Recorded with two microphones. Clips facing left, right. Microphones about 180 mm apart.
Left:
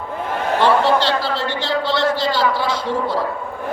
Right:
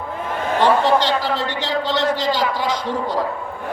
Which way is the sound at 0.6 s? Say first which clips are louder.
Even; 15° right (ahead or behind).